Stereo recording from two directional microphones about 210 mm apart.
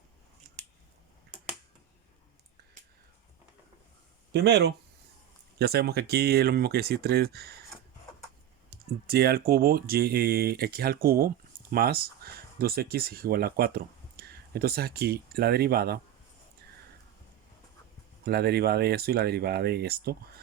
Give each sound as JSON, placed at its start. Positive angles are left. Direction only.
{"t": 4.3, "sound": "speech", "side_deg": -55}
{"t": 8.7, "sound": "speech", "side_deg": -50}
{"t": 18.3, "sound": "speech", "side_deg": -50}